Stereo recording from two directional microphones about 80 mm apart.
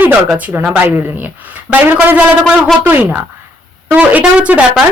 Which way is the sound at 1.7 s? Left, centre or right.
Right.